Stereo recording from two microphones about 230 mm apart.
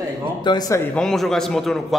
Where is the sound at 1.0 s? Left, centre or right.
Centre.